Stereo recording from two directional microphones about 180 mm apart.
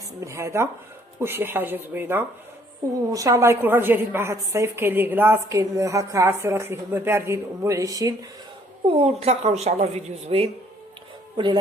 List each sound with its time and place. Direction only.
0.2 s a woman's voice: 15° right (ahead or behind)
8.9 s a woman's voice: 35° right (ahead or behind)